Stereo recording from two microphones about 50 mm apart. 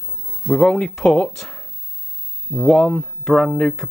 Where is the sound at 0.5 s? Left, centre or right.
Centre.